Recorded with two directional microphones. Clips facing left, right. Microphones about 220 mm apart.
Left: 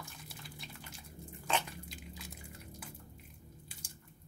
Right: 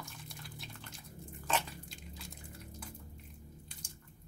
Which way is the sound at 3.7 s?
5° left (ahead or behind).